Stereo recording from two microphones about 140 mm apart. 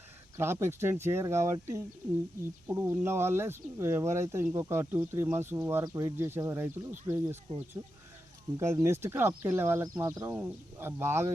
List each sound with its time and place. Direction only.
0.3 s speech: 20° right (ahead or behind)